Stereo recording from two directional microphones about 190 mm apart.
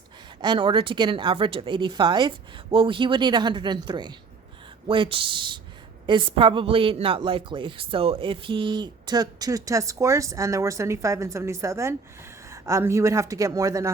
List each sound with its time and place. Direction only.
0.4 s a woman's voice: 25° right (ahead or behind)